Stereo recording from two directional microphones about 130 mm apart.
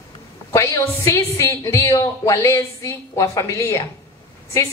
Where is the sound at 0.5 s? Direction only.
20° left (ahead or behind).